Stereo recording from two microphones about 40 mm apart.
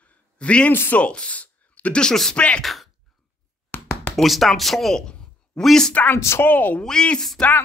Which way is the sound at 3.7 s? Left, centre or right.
Left.